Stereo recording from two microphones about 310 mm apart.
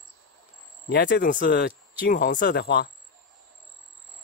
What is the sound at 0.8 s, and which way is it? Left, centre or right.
Speech, left.